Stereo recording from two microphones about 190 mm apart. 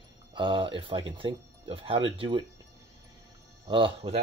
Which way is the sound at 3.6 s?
25° right (ahead or behind).